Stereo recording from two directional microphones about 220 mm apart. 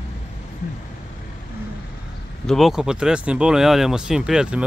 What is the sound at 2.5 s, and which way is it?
Speech, centre (ahead or behind).